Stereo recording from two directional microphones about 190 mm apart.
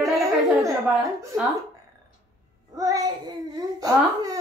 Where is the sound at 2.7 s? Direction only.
20° right (ahead or behind).